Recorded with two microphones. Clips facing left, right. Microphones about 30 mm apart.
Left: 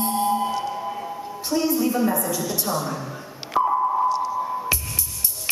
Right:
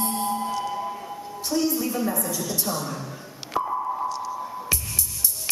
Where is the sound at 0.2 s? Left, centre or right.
Left.